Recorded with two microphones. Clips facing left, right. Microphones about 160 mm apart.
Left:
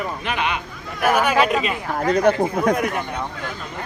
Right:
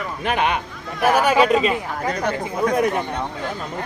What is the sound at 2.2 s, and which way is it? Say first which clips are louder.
Speech: left 5 dB; 50° left (ahead or behind).